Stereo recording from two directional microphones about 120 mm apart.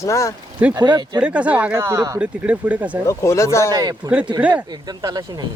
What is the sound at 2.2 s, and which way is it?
Speech, 10° right (ahead or behind).